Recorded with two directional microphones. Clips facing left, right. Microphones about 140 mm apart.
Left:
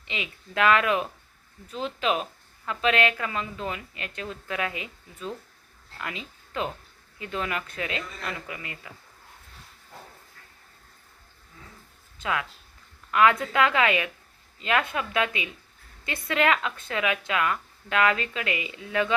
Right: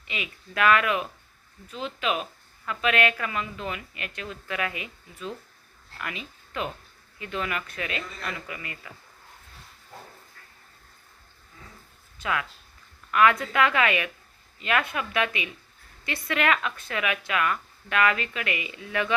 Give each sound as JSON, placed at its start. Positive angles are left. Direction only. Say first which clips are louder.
{"t": 0.1, "sound": "a woman's voice", "louder": "left 1 dB", "side_deg": 25}
{"t": 12.2, "sound": "a woman's voice", "louder": "even", "side_deg": 20}